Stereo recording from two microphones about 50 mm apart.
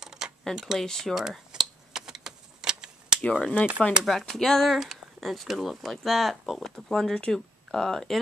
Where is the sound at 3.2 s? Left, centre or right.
Left.